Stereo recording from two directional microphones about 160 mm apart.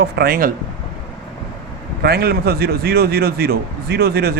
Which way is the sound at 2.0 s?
75° right (ahead or behind).